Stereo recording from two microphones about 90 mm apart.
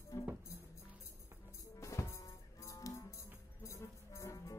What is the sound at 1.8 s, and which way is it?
Music, 35° left (ahead or behind).